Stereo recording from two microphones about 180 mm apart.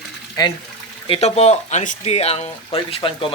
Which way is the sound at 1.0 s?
35° left (ahead or behind).